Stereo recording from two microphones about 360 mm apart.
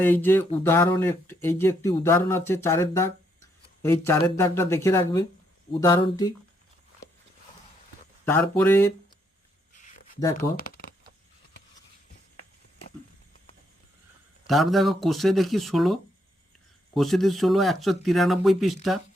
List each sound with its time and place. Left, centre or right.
0.0 s speech: centre
8.2 s speech: centre
9.7 s a sound: left
10.3 s speech: left
14.4 s speech: centre